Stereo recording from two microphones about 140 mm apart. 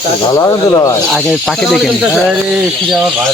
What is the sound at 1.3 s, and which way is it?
Speech, centre (ahead or behind).